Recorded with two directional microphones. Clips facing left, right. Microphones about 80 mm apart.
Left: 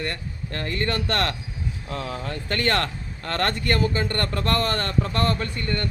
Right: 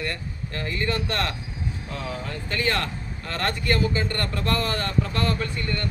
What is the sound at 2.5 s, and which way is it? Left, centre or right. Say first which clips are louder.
A man's voice: left 2 dB; left.